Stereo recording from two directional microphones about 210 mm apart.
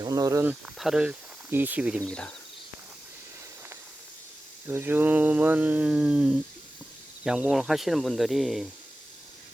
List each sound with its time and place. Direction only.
0.0 s speech: 15° right (ahead or behind)
0.6 s speech: centre (ahead or behind)
2.0 s speech: 5° left (ahead or behind)
4.6 s mantra: 10° right (ahead or behind)
7.3 s speech: 5° right (ahead or behind)